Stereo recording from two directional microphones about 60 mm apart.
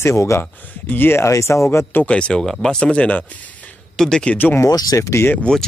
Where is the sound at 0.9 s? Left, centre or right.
Left.